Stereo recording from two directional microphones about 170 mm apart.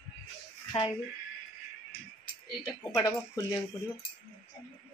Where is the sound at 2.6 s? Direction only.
15° left (ahead or behind).